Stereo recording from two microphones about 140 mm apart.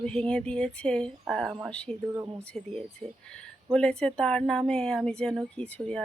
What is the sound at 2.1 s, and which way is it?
Speech, 20° right (ahead or behind).